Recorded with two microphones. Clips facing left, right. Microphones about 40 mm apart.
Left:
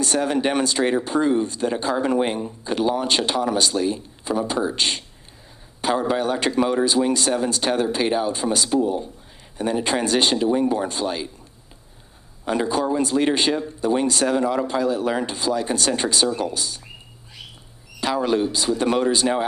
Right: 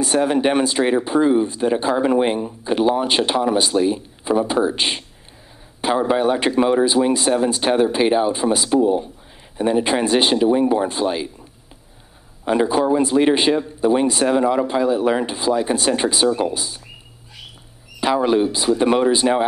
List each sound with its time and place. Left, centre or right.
0.0 s speech: centre
12.4 s speech: centre
18.0 s speech: centre